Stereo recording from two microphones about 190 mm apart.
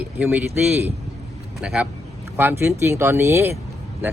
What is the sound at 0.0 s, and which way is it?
Speech, 10° right (ahead or behind).